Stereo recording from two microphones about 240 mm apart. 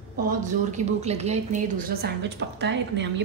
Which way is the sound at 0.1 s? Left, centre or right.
Right.